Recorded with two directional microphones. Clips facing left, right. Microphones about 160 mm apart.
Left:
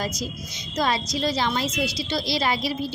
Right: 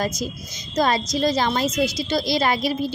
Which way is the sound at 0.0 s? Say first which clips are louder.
Right 4 dB; 50° right (ahead or behind).